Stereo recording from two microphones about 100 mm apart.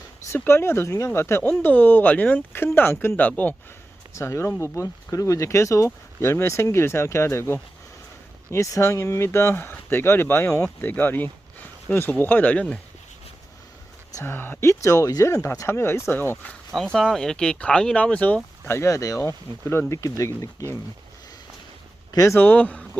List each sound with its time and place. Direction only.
0.3 s speech: 25° left (ahead or behind)
1.5 s speech: 15° left (ahead or behind)
4.1 s speech: 30° left (ahead or behind); by 12.6 s 15° left (ahead or behind)
14.2 s speech: 20° left (ahead or behind)
16.5 s speech: 5° left (ahead or behind)
18.6 s speech: 25° left (ahead or behind)
22.1 s speech: 35° left (ahead or behind)
22.4 s speech: 20° left (ahead or behind)